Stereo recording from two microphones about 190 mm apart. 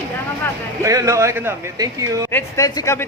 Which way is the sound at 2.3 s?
15° left (ahead or behind).